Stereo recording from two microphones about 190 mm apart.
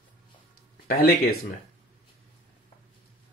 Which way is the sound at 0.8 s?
55° left (ahead or behind).